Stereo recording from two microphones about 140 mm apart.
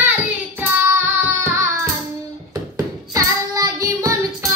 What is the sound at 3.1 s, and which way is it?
Child singing, 25° right (ahead or behind).